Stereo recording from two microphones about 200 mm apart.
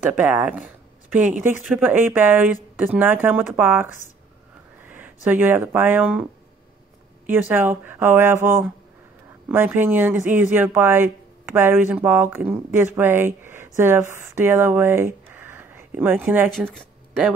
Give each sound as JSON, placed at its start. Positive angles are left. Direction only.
{"t": 0.0, "sound": "speech", "side_deg": -5}
{"t": 7.2, "sound": "speech", "side_deg": -10}